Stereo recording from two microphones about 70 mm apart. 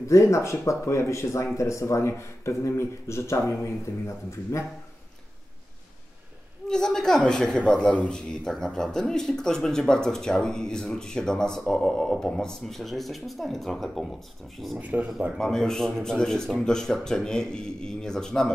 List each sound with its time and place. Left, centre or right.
0.0 s speech: left
6.7 s speech: centre
14.8 s speech: right
15.3 s speech: centre